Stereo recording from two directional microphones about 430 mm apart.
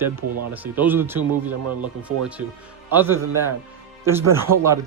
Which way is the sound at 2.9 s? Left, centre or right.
Centre.